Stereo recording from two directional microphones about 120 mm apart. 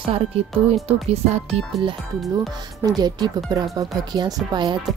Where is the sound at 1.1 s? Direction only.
60° right (ahead or behind).